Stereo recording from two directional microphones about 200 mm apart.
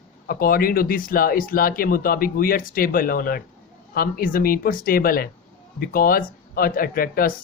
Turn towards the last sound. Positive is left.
turn(degrees=45)  # may be behind; listen again after turning